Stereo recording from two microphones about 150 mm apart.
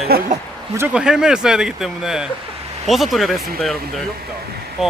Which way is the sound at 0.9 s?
5° right (ahead or behind).